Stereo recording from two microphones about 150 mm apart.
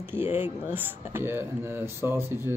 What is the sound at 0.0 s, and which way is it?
Speech, 15° right (ahead or behind).